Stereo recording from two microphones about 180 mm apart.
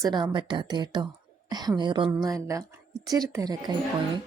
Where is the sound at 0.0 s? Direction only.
25° right (ahead or behind).